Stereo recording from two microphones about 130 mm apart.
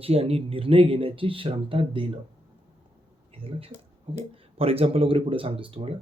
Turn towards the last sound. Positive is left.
turn(degrees=-45)  # may be behind; listen again after turning